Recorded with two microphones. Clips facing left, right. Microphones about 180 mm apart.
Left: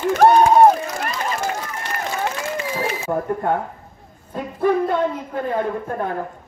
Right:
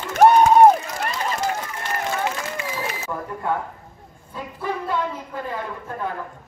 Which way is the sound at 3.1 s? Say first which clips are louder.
Left 5 dB; 50° left (ahead or behind).